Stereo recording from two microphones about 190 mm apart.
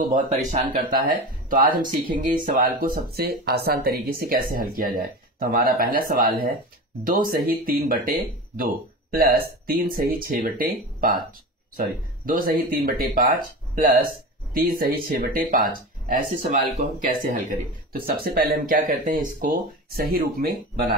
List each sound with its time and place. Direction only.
0.0 s speech: 40° right (ahead or behind)